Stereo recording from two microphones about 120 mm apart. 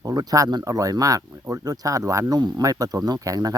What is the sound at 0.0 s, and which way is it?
Speech, 35° right (ahead or behind).